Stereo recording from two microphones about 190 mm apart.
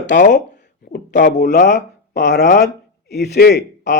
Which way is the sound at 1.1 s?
60° left (ahead or behind).